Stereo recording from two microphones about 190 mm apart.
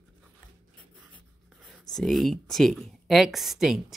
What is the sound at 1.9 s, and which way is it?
Speech, centre (ahead or behind).